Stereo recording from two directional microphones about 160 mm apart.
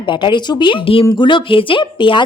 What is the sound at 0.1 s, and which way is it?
Speech, 30° left (ahead or behind).